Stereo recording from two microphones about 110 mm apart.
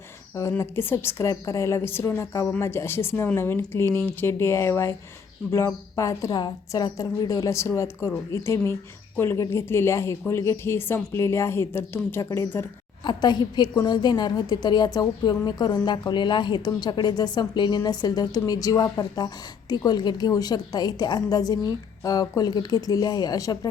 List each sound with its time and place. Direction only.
0.6 s a woman's voice: 20° left (ahead or behind)
13.1 s a woman's voice: 40° left (ahead or behind)